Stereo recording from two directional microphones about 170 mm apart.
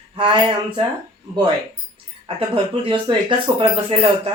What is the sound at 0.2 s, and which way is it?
Speech, 30° right (ahead or behind).